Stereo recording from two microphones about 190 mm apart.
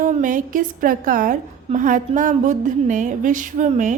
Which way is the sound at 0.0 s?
45° right (ahead or behind).